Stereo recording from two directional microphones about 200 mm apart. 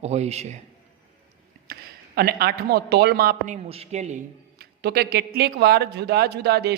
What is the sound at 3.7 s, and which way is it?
Speech, 30° right (ahead or behind).